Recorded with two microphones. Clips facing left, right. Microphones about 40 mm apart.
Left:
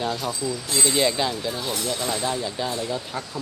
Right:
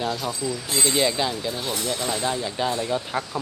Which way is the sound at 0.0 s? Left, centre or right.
Centre.